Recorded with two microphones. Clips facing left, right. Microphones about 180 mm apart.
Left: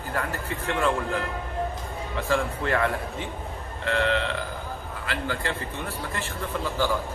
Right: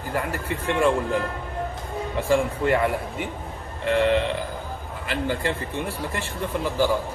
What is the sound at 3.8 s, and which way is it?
Burping, 20° right (ahead or behind).